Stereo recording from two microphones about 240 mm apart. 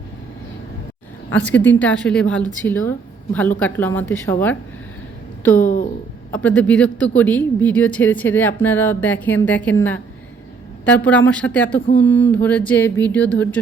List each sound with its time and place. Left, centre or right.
1.3 s a woman's voice: centre
5.5 s speech: left
6.3 s a woman's voice: centre